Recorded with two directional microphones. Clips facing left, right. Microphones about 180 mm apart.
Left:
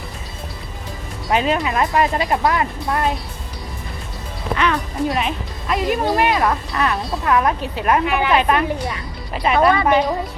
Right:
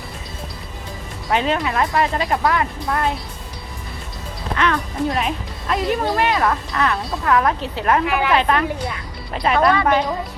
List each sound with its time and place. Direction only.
1.3 s speech: 10° left (ahead or behind)
4.5 s speech: 10° left (ahead or behind)